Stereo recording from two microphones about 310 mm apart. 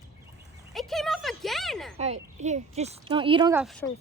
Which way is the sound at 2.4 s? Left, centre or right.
Right.